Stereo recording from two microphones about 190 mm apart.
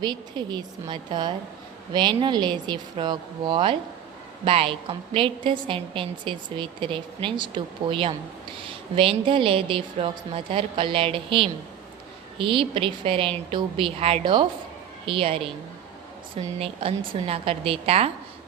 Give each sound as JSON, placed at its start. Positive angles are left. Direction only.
{"t": 0.0, "sound": "a woman's voice", "side_deg": -25}